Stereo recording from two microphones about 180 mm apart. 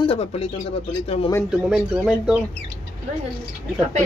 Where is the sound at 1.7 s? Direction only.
5° right (ahead or behind).